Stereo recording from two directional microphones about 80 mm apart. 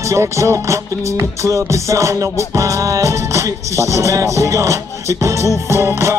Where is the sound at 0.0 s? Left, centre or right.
Right.